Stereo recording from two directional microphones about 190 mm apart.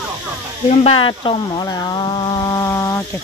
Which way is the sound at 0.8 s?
25° left (ahead or behind).